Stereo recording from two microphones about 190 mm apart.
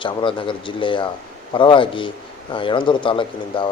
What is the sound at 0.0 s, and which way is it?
Speech, 25° left (ahead or behind).